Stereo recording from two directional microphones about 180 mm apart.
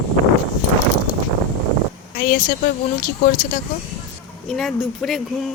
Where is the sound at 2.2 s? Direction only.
50° left (ahead or behind).